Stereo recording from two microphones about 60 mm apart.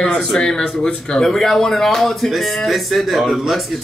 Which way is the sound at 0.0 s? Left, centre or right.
Centre.